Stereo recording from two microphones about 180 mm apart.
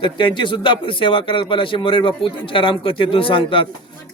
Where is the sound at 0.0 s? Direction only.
25° left (ahead or behind).